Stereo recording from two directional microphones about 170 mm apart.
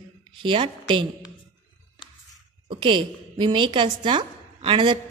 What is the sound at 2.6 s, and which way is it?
A woman's voice, 30° right (ahead or behind).